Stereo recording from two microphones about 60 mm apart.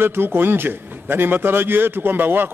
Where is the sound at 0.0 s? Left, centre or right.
Right.